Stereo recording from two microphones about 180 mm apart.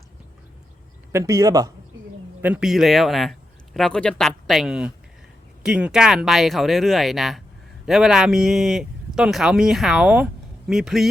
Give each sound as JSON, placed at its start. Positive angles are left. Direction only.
{"t": 1.1, "sound": "speech", "side_deg": -15}
{"t": 2.4, "sound": "speech", "side_deg": -5}